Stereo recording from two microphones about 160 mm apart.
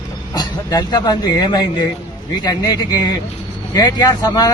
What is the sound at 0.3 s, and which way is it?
Speech, 25° left (ahead or behind).